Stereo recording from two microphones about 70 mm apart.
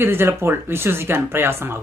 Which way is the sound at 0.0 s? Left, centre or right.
Right.